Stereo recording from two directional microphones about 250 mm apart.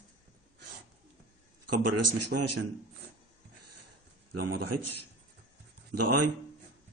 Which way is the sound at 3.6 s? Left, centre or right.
Right.